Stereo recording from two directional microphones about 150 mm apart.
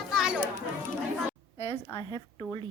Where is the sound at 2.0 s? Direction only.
30° left (ahead or behind).